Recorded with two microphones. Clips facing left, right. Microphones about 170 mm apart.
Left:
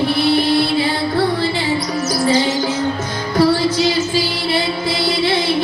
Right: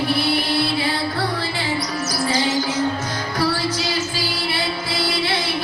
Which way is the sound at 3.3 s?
20° left (ahead or behind).